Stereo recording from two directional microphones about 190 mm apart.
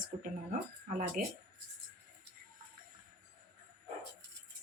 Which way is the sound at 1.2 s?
45° right (ahead or behind).